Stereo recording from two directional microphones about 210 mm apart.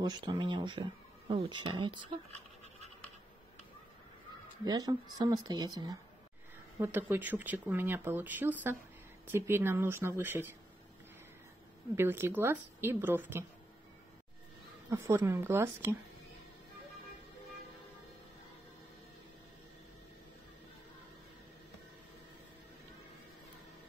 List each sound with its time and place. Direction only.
0.0 s speech: 20° right (ahead or behind)
4.6 s speech: 20° right (ahead or behind)
11.9 s speech: 10° right (ahead or behind)
14.9 s speech: 15° right (ahead or behind)